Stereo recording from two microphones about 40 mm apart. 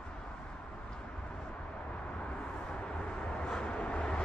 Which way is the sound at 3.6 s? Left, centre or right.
Left.